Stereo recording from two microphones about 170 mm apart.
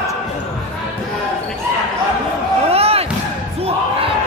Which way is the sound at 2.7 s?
35° right (ahead or behind).